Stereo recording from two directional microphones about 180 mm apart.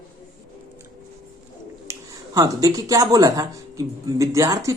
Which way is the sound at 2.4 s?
20° right (ahead or behind).